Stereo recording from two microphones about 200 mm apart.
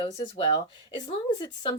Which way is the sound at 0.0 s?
25° left (ahead or behind).